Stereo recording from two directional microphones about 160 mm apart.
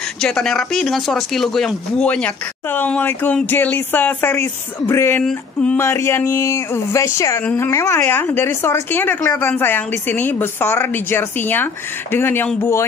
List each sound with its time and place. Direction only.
0.2 s speech: 5° left (ahead or behind)